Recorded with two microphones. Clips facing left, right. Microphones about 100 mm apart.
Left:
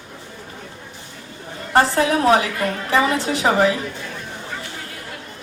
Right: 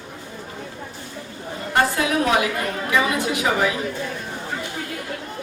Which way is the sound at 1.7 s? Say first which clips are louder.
Left 4 dB; 30° left (ahead or behind).